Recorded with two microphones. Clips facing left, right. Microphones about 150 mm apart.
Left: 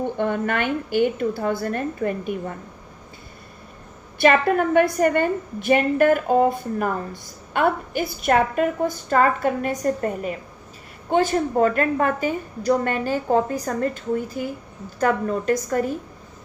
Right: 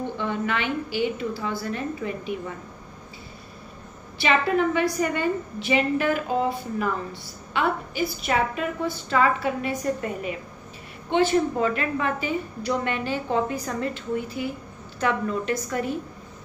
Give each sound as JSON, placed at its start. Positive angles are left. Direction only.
{"t": 0.2, "sound": "a woman's voice", "side_deg": 50}
{"t": 4.2, "sound": "a woman's voice", "side_deg": 50}